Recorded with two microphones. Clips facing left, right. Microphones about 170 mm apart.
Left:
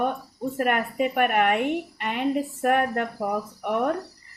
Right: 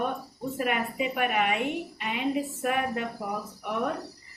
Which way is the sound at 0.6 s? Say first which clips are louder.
Left 5 dB; 55° left (ahead or behind).